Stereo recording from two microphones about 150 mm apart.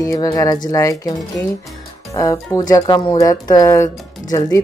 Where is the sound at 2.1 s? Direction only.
20° left (ahead or behind).